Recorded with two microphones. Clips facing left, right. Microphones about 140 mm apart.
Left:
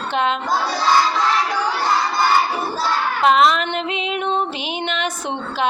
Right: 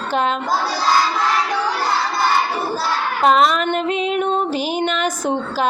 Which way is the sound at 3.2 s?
40° right (ahead or behind).